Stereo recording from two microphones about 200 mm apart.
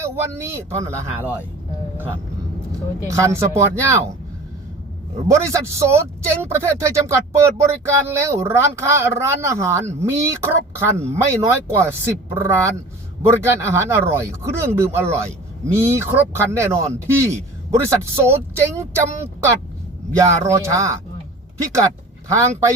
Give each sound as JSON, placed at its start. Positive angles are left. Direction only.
{"t": 0.0, "sound": "speech", "side_deg": -10}
{"t": 3.0, "sound": "speech", "side_deg": -15}
{"t": 5.3, "sound": "speech", "side_deg": -15}